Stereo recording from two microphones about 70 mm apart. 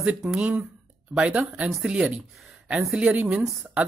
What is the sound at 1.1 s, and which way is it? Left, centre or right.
Speech, centre.